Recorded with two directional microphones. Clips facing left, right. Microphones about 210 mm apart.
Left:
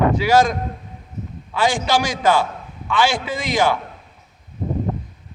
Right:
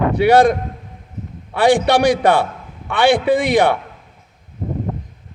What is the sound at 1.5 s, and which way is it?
A man's voice, 60° right (ahead or behind).